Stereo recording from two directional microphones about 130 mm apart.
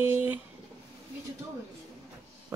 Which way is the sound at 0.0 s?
15° right (ahead or behind).